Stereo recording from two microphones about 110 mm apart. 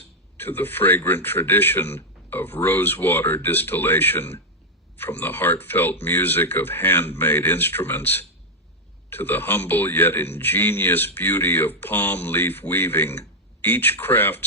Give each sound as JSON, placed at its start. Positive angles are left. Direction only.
{"t": 0.3, "sound": "a man's voice", "side_deg": 20}